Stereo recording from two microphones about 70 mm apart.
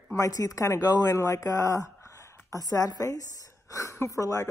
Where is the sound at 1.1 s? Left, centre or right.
Left.